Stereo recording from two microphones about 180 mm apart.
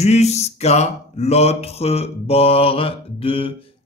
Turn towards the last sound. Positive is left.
turn(degrees=30)  # may be behind; listen again after turning